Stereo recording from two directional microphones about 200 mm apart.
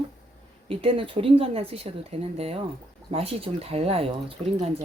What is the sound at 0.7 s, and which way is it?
Speech, 25° right (ahead or behind).